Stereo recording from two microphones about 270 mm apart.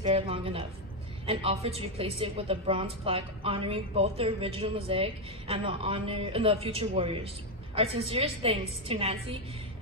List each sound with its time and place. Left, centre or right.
0.0 s a woman's voice: centre